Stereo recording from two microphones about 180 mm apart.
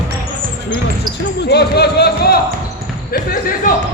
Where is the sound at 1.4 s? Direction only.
65° left (ahead or behind).